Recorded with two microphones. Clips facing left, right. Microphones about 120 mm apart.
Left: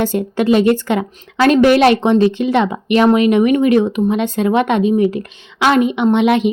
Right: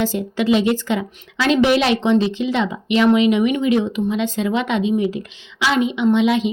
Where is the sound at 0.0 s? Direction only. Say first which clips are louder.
Left 4 dB; 55° left (ahead or behind).